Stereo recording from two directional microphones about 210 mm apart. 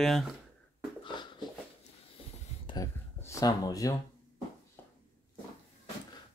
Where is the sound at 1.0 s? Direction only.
20° left (ahead or behind).